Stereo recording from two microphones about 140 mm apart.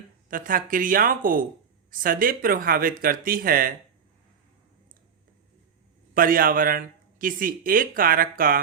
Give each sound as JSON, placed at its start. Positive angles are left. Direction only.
{"t": 0.3, "sound": "a man's voice", "side_deg": -80}
{"t": 6.1, "sound": "a man's voice", "side_deg": -90}